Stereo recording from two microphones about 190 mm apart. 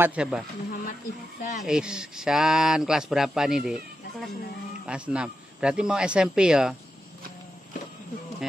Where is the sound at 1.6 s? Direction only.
5° right (ahead or behind).